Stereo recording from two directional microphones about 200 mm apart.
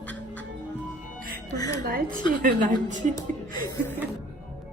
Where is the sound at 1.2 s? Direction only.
50° right (ahead or behind).